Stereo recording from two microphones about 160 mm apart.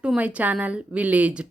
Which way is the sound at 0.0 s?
5° right (ahead or behind).